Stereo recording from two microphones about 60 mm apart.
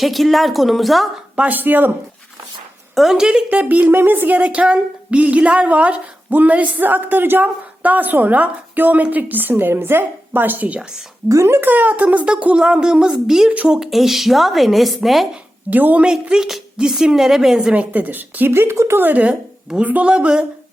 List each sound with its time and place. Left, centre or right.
0.0 s a woman's voice: centre
1.4 s speech: right
2.9 s a woman's voice: centre
3.2 s speech: centre
3.7 s a woman's voice: right; by 15.3 s centre
15.7 s a woman's voice: right
16.3 s speech: centre
17.7 s speech: right
18.9 s a woman's voice: right
19.3 s a woman's voice: centre